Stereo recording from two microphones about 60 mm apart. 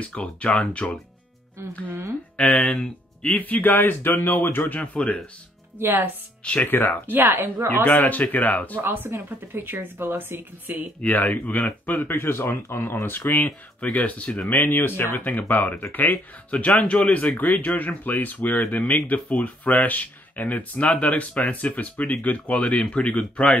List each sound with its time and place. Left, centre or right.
0.0 s speech: left
2.3 s speech: centre
3.3 s speech: left
4.7 s speech: centre
5.8 s speech: right
6.4 s speech: left
7.1 s speech: right
7.7 s speech: left
8.8 s speech: right
11.1 s speech: left